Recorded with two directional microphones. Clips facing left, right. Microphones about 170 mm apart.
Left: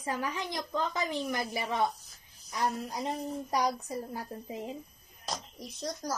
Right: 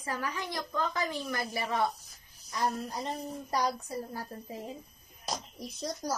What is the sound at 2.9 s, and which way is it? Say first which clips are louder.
A woman's voice: left 2 dB; 15° left (ahead or behind).